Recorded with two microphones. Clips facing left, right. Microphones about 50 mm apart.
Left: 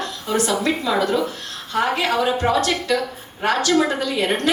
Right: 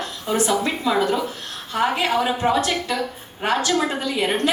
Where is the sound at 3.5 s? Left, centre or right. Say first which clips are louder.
Left 3 dB; right.